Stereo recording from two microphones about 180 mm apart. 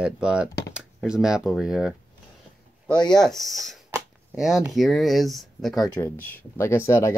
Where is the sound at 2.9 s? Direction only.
25° left (ahead or behind).